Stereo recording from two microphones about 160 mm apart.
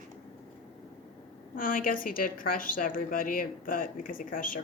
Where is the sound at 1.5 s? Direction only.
60° left (ahead or behind).